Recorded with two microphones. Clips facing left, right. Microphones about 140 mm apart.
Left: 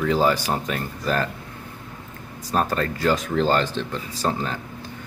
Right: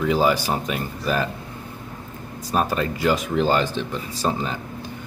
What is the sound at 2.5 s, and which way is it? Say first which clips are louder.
Speech: right 1 dB; 15° right (ahead or behind).